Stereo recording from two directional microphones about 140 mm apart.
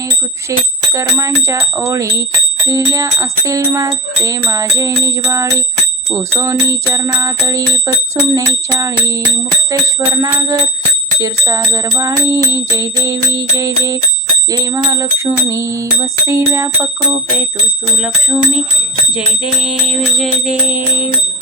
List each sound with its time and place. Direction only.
0.9 s music: 20° right (ahead or behind)
17.9 s music: 5° right (ahead or behind)
19.6 s music: centre (ahead or behind)
20.7 s music: 15° right (ahead or behind)